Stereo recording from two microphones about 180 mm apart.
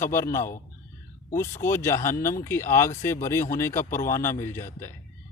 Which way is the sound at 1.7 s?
15° left (ahead or behind).